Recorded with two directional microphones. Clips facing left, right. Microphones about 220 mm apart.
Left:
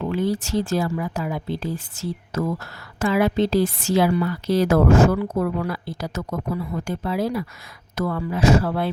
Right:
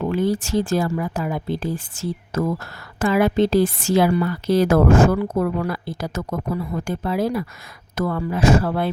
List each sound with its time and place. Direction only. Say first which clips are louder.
0.0 s speech: right 2 dB; 50° right (ahead or behind)